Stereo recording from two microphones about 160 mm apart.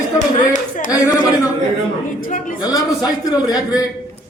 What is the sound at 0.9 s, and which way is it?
Speech, 20° left (ahead or behind).